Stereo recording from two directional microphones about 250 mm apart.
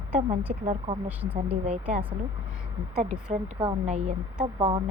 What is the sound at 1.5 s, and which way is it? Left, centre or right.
Speech, right.